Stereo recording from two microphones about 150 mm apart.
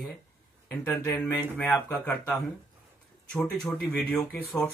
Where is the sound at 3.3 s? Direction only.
10° left (ahead or behind).